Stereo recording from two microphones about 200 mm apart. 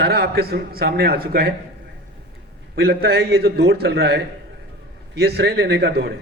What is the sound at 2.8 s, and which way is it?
A man's voice, 50° right (ahead or behind).